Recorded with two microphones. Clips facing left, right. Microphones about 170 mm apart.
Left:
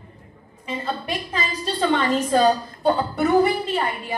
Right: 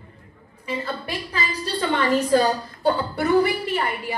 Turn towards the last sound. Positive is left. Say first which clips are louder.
# left 1 dB
turn(degrees=20)  # may be behind; listen again after turning